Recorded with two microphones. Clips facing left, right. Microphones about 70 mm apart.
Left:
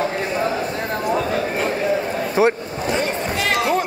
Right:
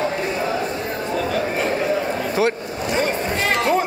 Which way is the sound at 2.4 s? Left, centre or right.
Left.